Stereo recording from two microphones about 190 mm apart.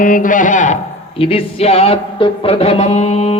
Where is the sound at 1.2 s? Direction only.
30° left (ahead or behind).